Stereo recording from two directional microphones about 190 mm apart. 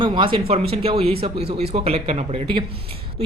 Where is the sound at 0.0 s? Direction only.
25° right (ahead or behind).